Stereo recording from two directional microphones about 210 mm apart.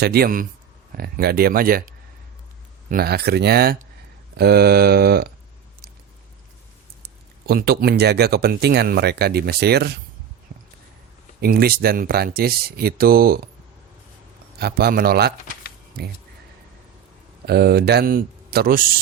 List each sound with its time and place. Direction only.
0.0 s speech: 45° right (ahead or behind)
2.9 s speech: 50° right (ahead or behind)
7.4 s speech: 45° right (ahead or behind)
10.5 s a sound: 50° right (ahead or behind)
11.3 s speech: 45° right (ahead or behind)
14.6 s speech: 45° right (ahead or behind)
17.4 s speech: 50° right (ahead or behind)